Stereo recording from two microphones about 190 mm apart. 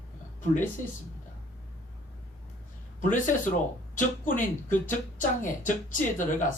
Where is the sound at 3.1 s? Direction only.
40° left (ahead or behind).